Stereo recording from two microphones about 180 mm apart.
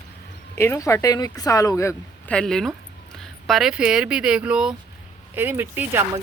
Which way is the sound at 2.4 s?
5° left (ahead or behind).